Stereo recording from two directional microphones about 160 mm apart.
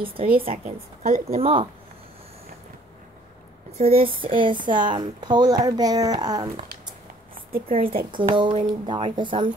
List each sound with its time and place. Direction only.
0.5 s a woman's voice: 45° right (ahead or behind)
3.7 s speech: 40° right (ahead or behind); by 6.4 s 25° right (ahead or behind)
7.6 s a woman's voice: 35° right (ahead or behind)